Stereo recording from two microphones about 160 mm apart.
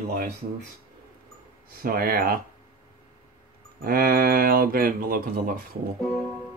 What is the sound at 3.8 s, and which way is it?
Speech, 65° right (ahead or behind).